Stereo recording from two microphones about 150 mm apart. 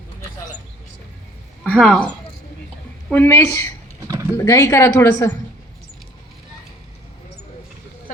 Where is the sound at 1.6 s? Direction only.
5° left (ahead or behind).